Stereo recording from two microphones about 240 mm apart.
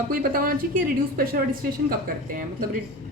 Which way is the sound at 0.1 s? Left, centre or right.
Right.